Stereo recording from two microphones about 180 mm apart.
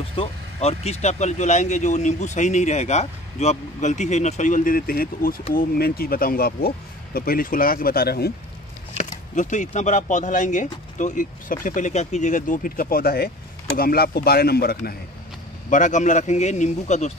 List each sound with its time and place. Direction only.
0.1 s speech: 35° left (ahead or behind); by 8.3 s 60° left (ahead or behind)
8.9 s a sound: 45° left (ahead or behind)
9.7 s speech: 40° left (ahead or behind); by 15.0 s 55° left (ahead or behind)
15.7 s speech: 45° left (ahead or behind)